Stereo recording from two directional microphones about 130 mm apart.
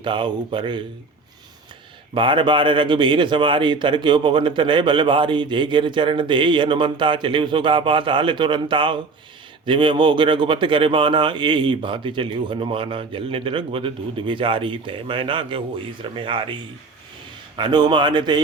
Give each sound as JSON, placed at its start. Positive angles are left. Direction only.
{"t": 0.0, "sound": "speech", "side_deg": -40}
{"t": 2.1, "sound": "speech", "side_deg": -40}
{"t": 17.6, "sound": "speech", "side_deg": -35}